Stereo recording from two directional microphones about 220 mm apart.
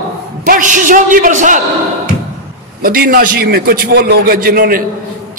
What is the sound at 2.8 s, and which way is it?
A man's voice, 45° right (ahead or behind).